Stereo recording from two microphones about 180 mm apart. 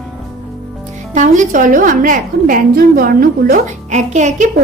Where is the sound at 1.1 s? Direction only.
45° right (ahead or behind).